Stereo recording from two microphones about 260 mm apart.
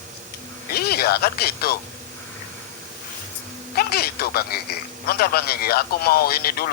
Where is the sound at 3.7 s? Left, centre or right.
Left.